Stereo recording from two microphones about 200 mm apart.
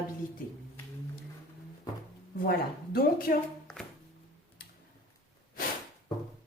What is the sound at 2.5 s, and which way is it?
Speech, 50° left (ahead or behind).